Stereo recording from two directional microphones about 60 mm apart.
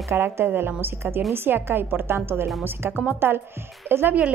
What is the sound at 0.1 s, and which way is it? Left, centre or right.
Speech, right.